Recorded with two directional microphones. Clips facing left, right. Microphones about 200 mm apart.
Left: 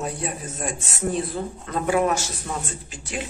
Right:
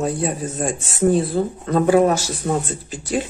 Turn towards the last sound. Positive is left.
turn(degrees=-35)  # may be behind; listen again after turning